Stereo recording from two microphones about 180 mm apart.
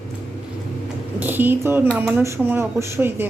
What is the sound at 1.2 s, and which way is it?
A woman's voice, 10° right (ahead or behind).